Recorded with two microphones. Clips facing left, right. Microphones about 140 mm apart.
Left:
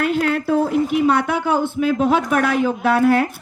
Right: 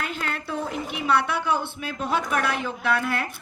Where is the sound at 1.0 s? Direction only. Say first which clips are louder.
Left 6 dB; 45° left (ahead or behind).